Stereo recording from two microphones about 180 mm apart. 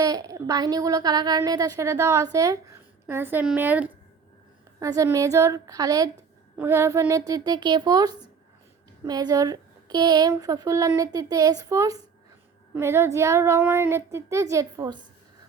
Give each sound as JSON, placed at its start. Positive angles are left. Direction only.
{"t": 0.0, "sound": "a woman's voice", "side_deg": -20}